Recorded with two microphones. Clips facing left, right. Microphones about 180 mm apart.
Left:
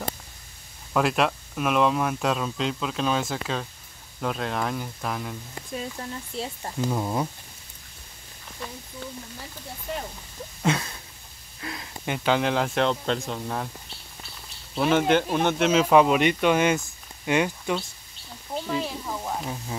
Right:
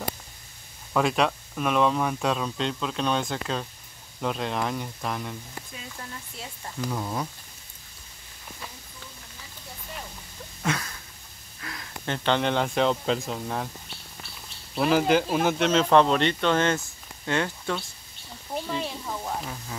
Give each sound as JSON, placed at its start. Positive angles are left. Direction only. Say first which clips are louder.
{"t": 0.9, "sound": "speech", "louder": "even", "side_deg": 0}
{"t": 5.9, "sound": "speech", "louder": "left 7 dB", "side_deg": 30}
{"t": 10.6, "sound": "a sound", "louder": "left 4 dB", "side_deg": 25}
{"t": 11.6, "sound": "speech", "louder": "left 4 dB", "side_deg": 25}
{"t": 12.1, "sound": "speech", "louder": "left 1 dB", "side_deg": 5}
{"t": 14.8, "sound": "speech", "louder": "left 1 dB", "side_deg": 0}
{"t": 18.7, "sound": "speech", "louder": "left 4 dB", "side_deg": 0}